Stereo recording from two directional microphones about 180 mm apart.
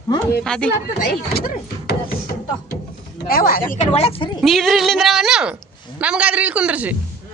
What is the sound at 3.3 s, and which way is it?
Speech, 55° left (ahead or behind).